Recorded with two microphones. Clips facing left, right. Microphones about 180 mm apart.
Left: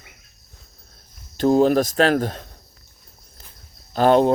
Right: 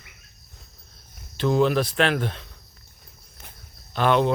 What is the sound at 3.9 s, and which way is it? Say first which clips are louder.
Speech: left 5 dB; 40° left (ahead or behind).